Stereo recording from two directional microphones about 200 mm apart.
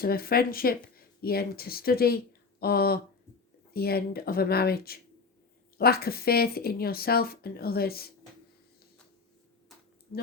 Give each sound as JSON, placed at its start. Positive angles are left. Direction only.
{"t": 0.0, "sound": "speech", "side_deg": 50}